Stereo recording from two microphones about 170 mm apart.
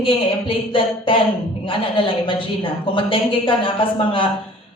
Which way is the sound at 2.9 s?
30° left (ahead or behind).